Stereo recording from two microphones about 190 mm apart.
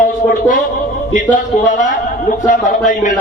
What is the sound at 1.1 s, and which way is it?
Music, 40° left (ahead or behind).